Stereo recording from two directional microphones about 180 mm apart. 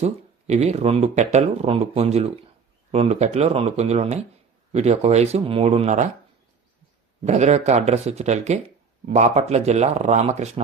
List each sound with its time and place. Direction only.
0.0 s speech: 35° right (ahead or behind)
7.3 s speech: 40° right (ahead or behind)